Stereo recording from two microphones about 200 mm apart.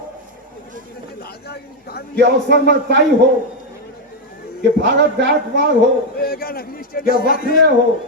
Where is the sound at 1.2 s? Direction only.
50° left (ahead or behind).